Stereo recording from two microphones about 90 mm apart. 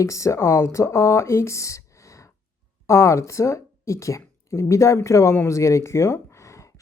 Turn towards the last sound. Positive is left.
turn(degrees=35)  # may be behind; listen again after turning